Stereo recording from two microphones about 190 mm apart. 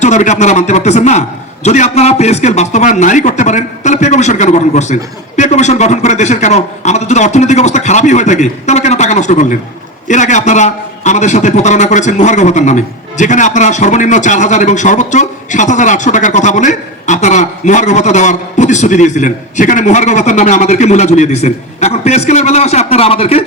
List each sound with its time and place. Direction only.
0.0 s a man's voice: 40° left (ahead or behind)